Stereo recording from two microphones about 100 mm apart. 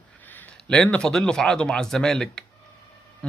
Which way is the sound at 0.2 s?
20° left (ahead or behind).